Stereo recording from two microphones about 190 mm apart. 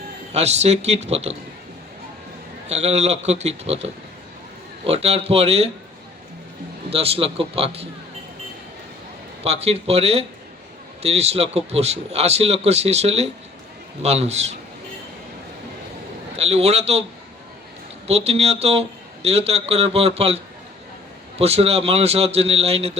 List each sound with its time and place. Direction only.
0.3 s a man's voice: 35° right (ahead or behind)
2.6 s a man's voice: 35° right (ahead or behind)
6.9 s a man's voice: 30° right (ahead or behind)
9.4 s a man's voice: 35° right (ahead or behind)
16.4 s a man's voice: 35° right (ahead or behind)
18.1 s a man's voice: 35° right (ahead or behind)